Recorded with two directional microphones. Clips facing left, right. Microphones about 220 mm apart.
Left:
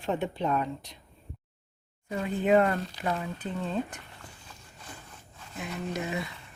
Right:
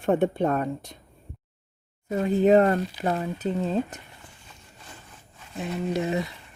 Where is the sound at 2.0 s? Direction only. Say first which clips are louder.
Right 6 dB; 40° right (ahead or behind).